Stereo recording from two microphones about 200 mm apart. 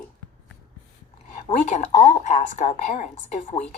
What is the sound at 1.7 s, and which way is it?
A woman's voice, 35° left (ahead or behind).